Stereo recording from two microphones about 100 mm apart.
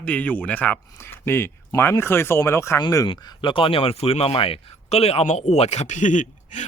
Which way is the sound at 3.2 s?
40° left (ahead or behind).